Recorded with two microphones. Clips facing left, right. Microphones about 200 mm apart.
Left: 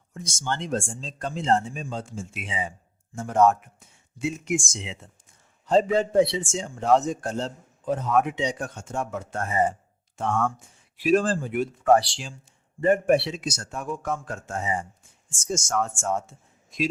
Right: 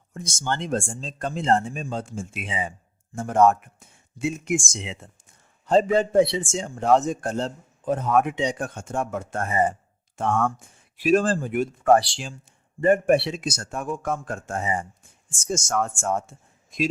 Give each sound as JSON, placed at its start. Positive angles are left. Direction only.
{"t": 0.1, "sound": "a man's voice", "side_deg": -50}